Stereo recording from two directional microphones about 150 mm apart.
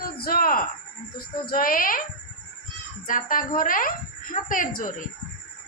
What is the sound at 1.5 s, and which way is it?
Speech, 70° left (ahead or behind).